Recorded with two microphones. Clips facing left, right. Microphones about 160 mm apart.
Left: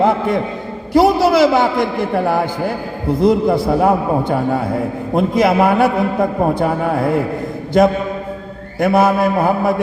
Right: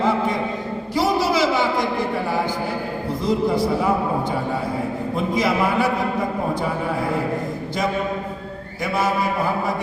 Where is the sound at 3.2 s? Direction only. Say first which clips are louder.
Left 6 dB; 60° left (ahead or behind).